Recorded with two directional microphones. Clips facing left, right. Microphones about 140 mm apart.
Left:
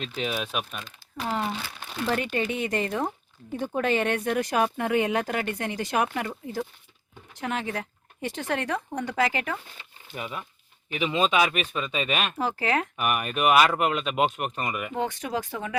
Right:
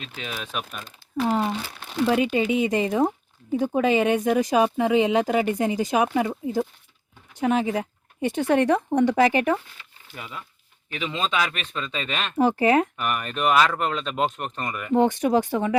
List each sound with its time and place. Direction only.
0.2 s speech: 15° left (ahead or behind)
0.5 s speech: centre (ahead or behind)
1.2 s speech: 15° right (ahead or behind)
2.0 s speech: 10° right (ahead or behind)
9.7 s a sound: 20° left (ahead or behind)
10.8 s speech: 15° left (ahead or behind)
12.4 s speech: 20° right (ahead or behind)
13.0 s speech: 10° left (ahead or behind)
15.2 s speech: 20° right (ahead or behind)